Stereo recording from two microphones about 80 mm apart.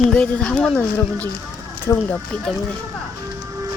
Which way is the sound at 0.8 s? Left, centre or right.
Left.